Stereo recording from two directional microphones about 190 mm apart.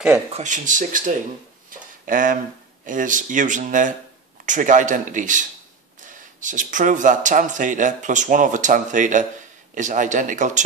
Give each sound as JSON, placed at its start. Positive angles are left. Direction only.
{"t": 0.3, "sound": "speech", "side_deg": -40}
{"t": 1.7, "sound": "a sound", "side_deg": -45}
{"t": 2.9, "sound": "speech", "side_deg": -45}